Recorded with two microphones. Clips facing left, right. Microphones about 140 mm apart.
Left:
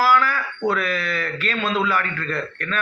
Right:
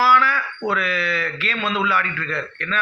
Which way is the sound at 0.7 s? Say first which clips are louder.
Right 1 dB; 40° left (ahead or behind).